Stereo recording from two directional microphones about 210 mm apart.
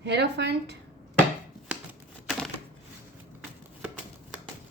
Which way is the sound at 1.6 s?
5° right (ahead or behind).